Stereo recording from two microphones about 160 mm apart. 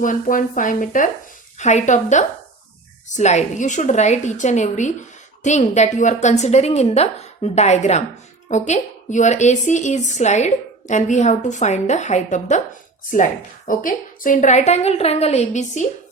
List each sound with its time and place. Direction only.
0.0 s speech: 55° left (ahead or behind)
13.7 s speech: 55° left (ahead or behind)